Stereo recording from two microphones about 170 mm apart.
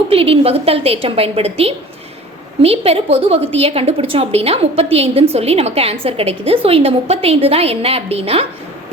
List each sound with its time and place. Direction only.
0.1 s a woman's voice: 35° right (ahead or behind)